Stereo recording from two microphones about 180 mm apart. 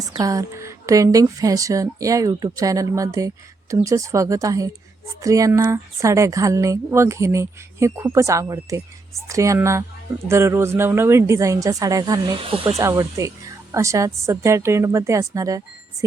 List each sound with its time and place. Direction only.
0.0 s a woman's voice: 20° right (ahead or behind)
12.8 s speech: 15° right (ahead or behind)